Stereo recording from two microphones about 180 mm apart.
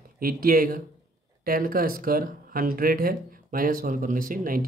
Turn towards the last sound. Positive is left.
turn(degrees=-50)  # may be behind; listen again after turning